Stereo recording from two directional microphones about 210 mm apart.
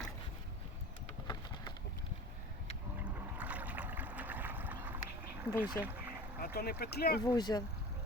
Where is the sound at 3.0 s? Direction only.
5° right (ahead or behind).